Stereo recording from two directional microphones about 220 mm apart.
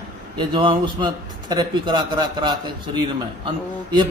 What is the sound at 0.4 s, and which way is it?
A man's voice, 20° right (ahead or behind).